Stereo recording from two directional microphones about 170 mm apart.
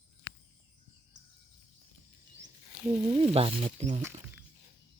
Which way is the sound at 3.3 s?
35° right (ahead or behind).